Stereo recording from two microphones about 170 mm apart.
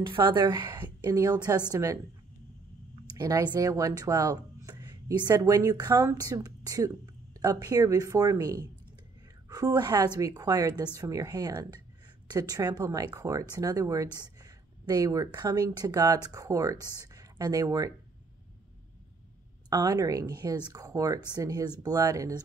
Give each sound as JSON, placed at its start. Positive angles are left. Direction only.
{"t": 0.1, "sound": "speech", "side_deg": -30}
{"t": 3.2, "sound": "speech", "side_deg": -20}
{"t": 19.7, "sound": "speech", "side_deg": -20}